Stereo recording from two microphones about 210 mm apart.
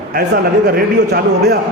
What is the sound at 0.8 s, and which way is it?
Speech, 50° right (ahead or behind).